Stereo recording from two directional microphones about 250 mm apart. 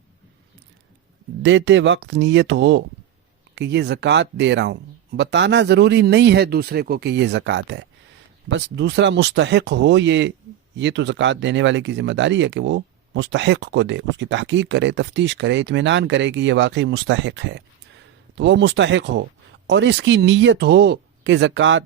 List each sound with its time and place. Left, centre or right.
1.4 s speech: right